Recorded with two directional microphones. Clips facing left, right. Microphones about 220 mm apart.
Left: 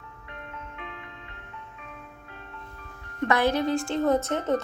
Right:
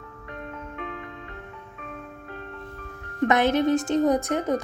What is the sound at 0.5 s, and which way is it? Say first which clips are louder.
Music: right 6 dB; 45° right (ahead or behind).